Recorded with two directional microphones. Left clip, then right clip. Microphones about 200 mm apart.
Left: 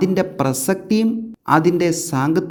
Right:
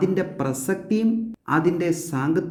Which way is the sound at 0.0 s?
35° left (ahead or behind).